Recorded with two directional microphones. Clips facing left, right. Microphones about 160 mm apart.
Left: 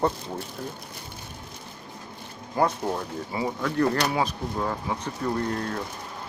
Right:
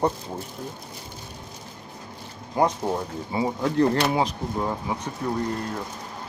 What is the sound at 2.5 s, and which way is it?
Speech, 15° right (ahead or behind).